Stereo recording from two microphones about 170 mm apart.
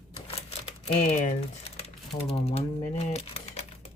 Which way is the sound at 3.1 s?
40° left (ahead or behind).